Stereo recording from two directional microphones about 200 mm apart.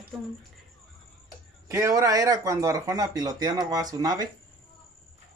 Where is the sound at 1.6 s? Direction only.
15° right (ahead or behind).